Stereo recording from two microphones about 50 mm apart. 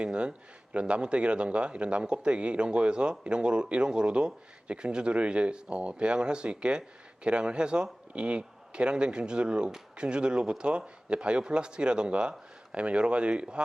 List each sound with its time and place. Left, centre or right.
0.0 s speech: right